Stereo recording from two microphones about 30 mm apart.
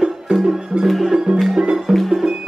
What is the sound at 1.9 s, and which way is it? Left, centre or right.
Music, centre.